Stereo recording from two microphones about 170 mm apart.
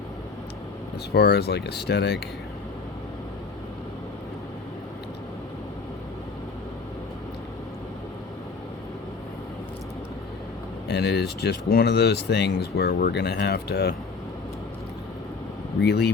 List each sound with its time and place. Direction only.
1.1 s speech: 70° left (ahead or behind)
10.8 s speech: 75° left (ahead or behind)
15.8 s speech: 75° left (ahead or behind)